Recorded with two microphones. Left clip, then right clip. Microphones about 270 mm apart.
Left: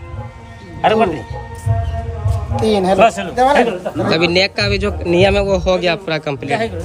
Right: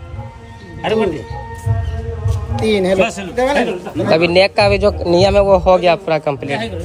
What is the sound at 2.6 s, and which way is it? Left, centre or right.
Speech, centre.